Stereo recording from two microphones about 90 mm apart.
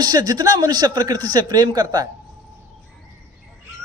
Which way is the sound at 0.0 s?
50° right (ahead or behind).